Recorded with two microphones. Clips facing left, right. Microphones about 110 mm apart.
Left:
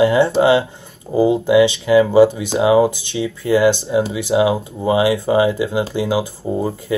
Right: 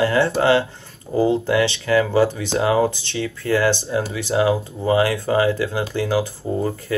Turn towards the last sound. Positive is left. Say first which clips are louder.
# left 2 dB
turn(degrees=15)  # may be behind; listen again after turning